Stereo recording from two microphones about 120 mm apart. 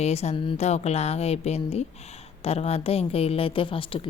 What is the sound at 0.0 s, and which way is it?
A woman's voice, 60° left (ahead or behind).